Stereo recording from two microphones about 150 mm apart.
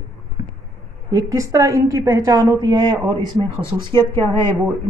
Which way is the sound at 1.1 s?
20° right (ahead or behind).